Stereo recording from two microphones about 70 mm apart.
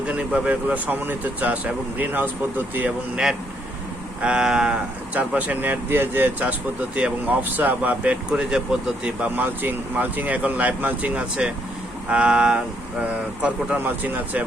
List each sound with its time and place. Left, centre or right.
0.1 s speech: centre
4.2 s speech: centre
9.3 s speech: right